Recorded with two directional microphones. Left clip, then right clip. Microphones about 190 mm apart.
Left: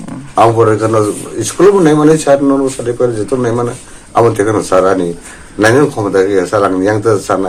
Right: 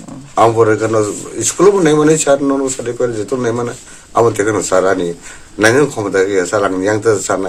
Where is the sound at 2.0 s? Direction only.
20° right (ahead or behind).